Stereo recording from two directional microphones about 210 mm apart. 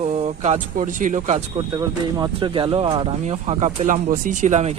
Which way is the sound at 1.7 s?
20° right (ahead or behind).